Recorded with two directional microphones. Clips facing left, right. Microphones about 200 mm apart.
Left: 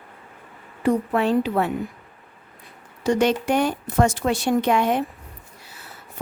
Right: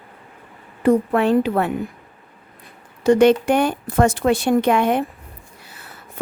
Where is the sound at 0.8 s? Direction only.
55° right (ahead or behind).